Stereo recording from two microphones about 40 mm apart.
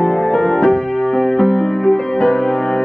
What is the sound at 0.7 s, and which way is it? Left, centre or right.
Music, centre.